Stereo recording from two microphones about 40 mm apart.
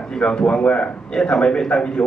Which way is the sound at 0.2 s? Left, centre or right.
Left.